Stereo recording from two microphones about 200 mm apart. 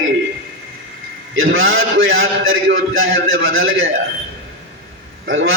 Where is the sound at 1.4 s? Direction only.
80° right.